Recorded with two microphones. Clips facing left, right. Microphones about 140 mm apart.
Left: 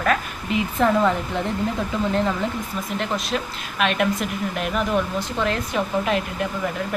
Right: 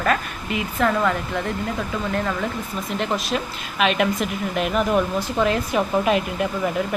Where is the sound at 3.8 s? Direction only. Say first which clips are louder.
Right 1 dB; centre (ahead or behind).